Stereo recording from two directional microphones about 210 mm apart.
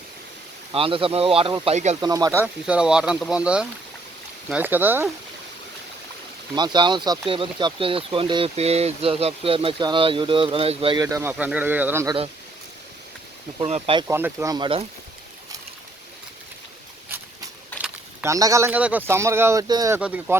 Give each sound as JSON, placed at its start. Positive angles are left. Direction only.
{"t": 0.7, "sound": "speech", "side_deg": -25}
{"t": 2.0, "sound": "speech", "side_deg": -20}
{"t": 6.6, "sound": "speech", "side_deg": -20}
{"t": 13.6, "sound": "speech", "side_deg": -30}
{"t": 14.1, "sound": "speech", "side_deg": -10}
{"t": 17.8, "sound": "speech", "side_deg": -10}
{"t": 20.0, "sound": "speech", "side_deg": -5}